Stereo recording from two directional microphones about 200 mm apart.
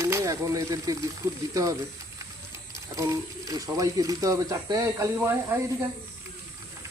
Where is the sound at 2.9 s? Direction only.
15° right (ahead or behind).